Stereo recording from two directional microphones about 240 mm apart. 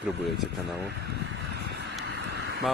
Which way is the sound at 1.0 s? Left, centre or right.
Right.